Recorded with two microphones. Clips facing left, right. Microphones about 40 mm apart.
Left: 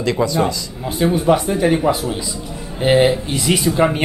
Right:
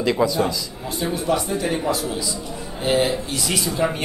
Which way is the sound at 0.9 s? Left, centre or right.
Centre.